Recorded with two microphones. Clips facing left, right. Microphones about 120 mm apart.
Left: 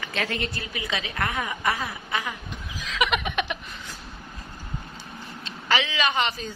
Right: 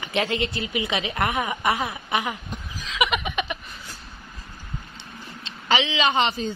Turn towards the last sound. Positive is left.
turn(degrees=-25)  # may be behind; listen again after turning